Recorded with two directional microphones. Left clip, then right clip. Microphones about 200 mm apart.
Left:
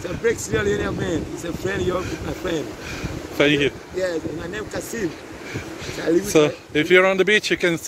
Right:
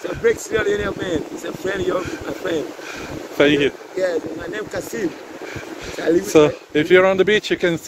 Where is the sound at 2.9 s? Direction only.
25° right (ahead or behind).